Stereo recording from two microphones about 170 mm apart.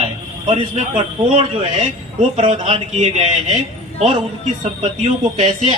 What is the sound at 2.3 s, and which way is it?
Speech, 35° right (ahead or behind).